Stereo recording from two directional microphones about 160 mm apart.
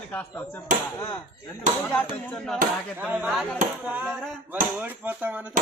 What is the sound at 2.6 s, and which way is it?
Speech, 60° right (ahead or behind).